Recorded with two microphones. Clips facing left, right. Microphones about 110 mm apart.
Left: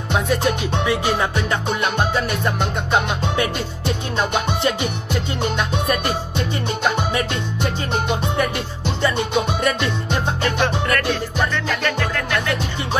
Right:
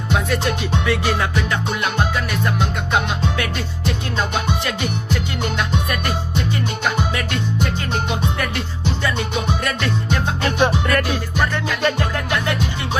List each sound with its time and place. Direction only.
0.1 s music: 15° left (ahead or behind)
2.1 s music: 30° left (ahead or behind)
5.9 s music: 30° left (ahead or behind)
10.6 s music: 15° right (ahead or behind)